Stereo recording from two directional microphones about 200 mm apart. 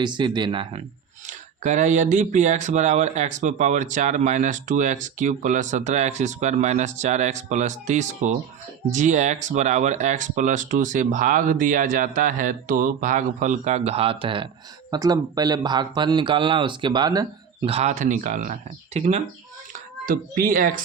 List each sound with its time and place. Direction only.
0.0 s speech: 20° right (ahead or behind)
17.7 s a child's voice: 35° right (ahead or behind)